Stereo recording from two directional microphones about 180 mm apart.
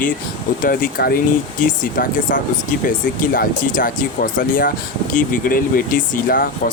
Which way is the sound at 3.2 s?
50° left (ahead or behind).